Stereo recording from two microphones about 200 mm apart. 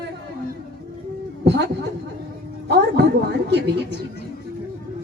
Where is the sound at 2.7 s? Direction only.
55° right (ahead or behind).